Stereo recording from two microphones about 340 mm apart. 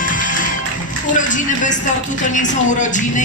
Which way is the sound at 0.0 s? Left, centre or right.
Left.